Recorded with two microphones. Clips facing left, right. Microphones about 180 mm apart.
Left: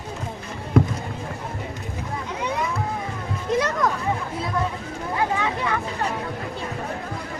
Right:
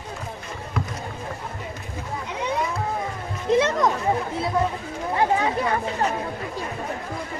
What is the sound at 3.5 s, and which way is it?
Music, 20° right (ahead or behind).